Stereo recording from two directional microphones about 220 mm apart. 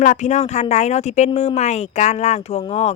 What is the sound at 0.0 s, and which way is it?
Speech, 35° left (ahead or behind).